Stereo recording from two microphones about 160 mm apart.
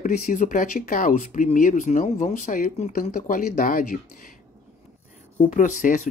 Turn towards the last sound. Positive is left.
turn(degrees=55)  # may be behind; listen again after turning